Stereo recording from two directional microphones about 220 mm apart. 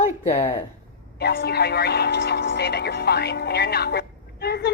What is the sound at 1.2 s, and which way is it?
Speech, 45° left (ahead or behind).